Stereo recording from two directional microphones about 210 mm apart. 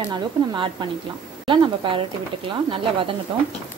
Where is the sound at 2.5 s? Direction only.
25° right (ahead or behind).